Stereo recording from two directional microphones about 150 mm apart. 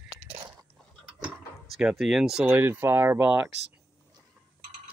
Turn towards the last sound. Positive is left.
turn(degrees=-15)  # may be behind; listen again after turning